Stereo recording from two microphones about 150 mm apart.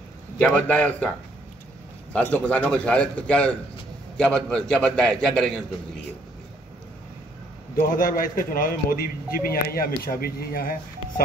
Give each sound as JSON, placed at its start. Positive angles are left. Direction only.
{"t": 0.4, "sound": "a man's voice", "side_deg": 10}
{"t": 2.3, "sound": "a man's voice", "side_deg": 10}
{"t": 7.8, "sound": "a man's voice", "side_deg": 70}